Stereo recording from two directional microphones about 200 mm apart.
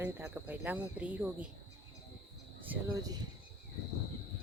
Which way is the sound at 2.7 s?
15° right (ahead or behind).